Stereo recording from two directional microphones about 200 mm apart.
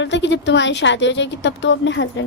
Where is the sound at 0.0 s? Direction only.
65° left (ahead or behind).